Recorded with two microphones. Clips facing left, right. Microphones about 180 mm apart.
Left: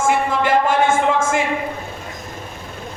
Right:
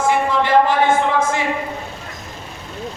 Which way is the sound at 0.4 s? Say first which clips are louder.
Right 1 dB; 50° left (ahead or behind).